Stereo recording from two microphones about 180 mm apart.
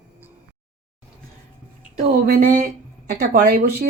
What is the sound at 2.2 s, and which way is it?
Speech, 50° right (ahead or behind).